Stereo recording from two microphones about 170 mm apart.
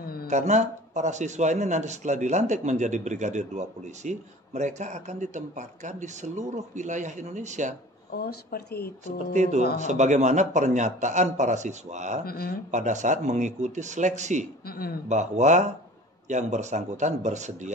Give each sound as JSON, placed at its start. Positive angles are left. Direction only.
{"t": 0.3, "sound": "a man's voice", "side_deg": -40}
{"t": 8.1, "sound": "speech", "side_deg": 65}
{"t": 9.3, "sound": "a man's voice", "side_deg": -45}
{"t": 12.3, "sound": "speech", "side_deg": 60}
{"t": 12.7, "sound": "a man's voice", "side_deg": -45}
{"t": 14.7, "sound": "speech", "side_deg": 60}
{"t": 15.0, "sound": "a man's voice", "side_deg": -45}